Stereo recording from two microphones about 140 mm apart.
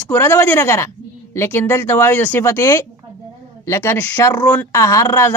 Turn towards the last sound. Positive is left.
turn(degrees=20)  # may be behind; listen again after turning